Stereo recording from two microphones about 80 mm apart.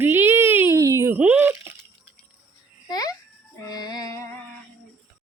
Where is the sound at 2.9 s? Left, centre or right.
Left.